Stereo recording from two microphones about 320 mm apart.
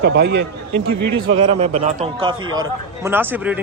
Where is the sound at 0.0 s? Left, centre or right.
Right.